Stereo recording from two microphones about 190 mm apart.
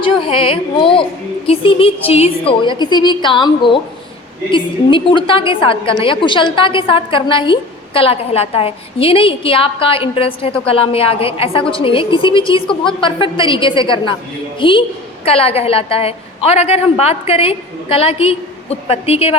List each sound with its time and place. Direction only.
0.0 s a woman's voice: 25° left (ahead or behind)